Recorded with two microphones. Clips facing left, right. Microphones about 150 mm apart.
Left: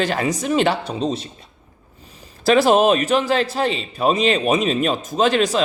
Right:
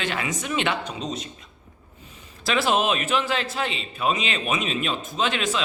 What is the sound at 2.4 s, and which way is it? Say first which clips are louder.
A man's voice: left 8 dB; 40° left (ahead or behind).